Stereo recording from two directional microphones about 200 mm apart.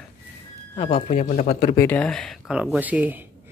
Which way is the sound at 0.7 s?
30° left (ahead or behind).